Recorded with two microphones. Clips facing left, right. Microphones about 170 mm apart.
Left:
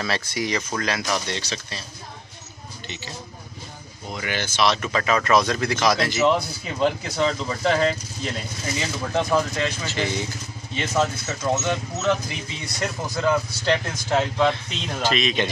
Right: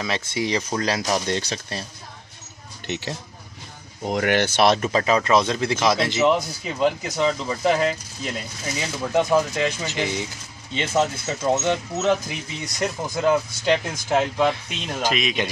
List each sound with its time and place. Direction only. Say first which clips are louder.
0.0 s speech: right 1 dB; 20° right (ahead or behind); by 1.9 s 55° right (ahead or behind)
4.0 s speech: right 9 dB; 70° right (ahead or behind)
4.7 s speech: right 3 dB; 35° right (ahead or behind)
6.2 s speech: right 1 dB; 5° right (ahead or behind)
13.7 s speech: right 2 dB; 10° right (ahead or behind)